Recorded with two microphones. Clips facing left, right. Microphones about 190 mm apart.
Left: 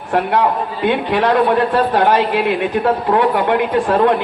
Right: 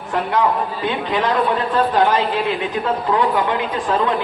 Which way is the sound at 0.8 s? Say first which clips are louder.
Left 6 dB; 65° left (ahead or behind).